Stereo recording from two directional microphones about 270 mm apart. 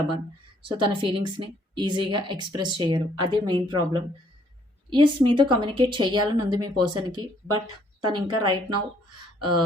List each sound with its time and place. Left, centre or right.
0.7 s a woman's voice: centre